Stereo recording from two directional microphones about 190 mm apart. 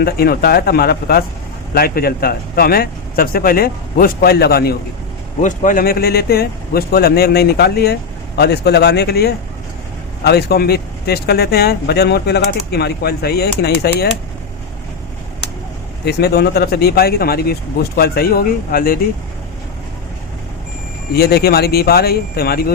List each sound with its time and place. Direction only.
0.0 s speech: 55° left (ahead or behind)
5.4 s speech: 45° left (ahead or behind)
16.0 s speech: 60° left (ahead or behind)
21.1 s speech: 55° left (ahead or behind)